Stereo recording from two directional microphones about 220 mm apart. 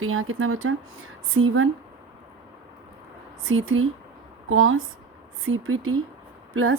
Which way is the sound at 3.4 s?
65° right (ahead or behind).